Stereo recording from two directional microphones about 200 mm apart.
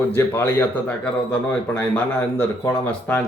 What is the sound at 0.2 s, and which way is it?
Speech, 10° left (ahead or behind).